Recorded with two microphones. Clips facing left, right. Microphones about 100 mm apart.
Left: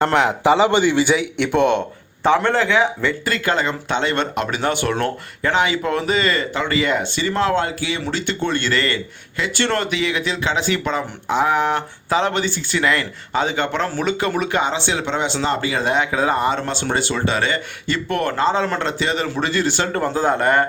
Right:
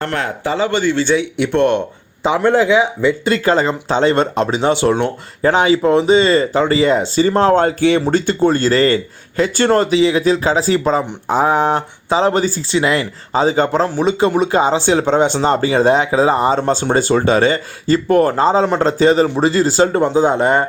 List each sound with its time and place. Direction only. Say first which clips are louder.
0.4 s a man's voice: even; 20° left (ahead or behind); by 1.8 s centre (ahead or behind)
2.2 s speech: right 3 dB; 15° right (ahead or behind)
3.2 s speech: right 5 dB; 35° right (ahead or behind)
5.5 s speech: right 7 dB; 35° right (ahead or behind)
8.1 s speech: right 8 dB; 40° right (ahead or behind); by 20.7 s 20° right (ahead or behind)